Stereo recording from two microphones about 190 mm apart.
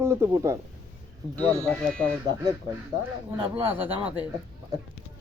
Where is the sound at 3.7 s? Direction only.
10° right (ahead or behind).